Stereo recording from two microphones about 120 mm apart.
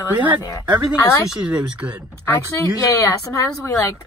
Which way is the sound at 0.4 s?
25° left (ahead or behind).